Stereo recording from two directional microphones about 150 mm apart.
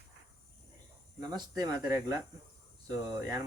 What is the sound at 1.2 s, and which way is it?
Speech, 25° right (ahead or behind).